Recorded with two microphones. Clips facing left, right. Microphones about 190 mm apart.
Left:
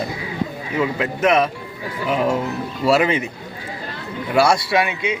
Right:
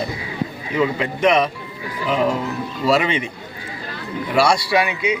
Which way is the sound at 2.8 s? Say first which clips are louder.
Left 2 dB; 5° left (ahead or behind).